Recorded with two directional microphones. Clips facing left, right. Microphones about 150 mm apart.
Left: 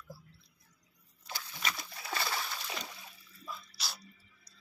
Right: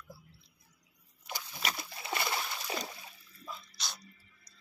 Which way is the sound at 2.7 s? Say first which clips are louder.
Right 4 dB; 35° right (ahead or behind).